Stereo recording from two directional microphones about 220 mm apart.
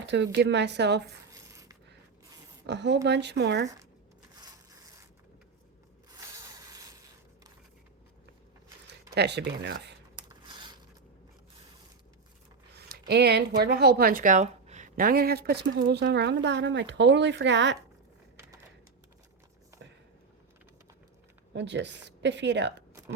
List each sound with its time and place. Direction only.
0.0 s a woman's voice: 55° right (ahead or behind)
1.3 s coin: 15° right (ahead or behind)
2.6 s a woman's voice: 50° right (ahead or behind)
4.4 s crushing: 15° right (ahead or behind)
6.1 s a sound: 15° right (ahead or behind)
9.1 s a woman's voice: 50° right (ahead or behind)
10.2 s a sound: 20° right (ahead or behind)
12.7 s a sound: 50° right (ahead or behind)
13.6 s a woman's voice: 45° right (ahead or behind)
21.5 s a woman's voice: 55° right (ahead or behind)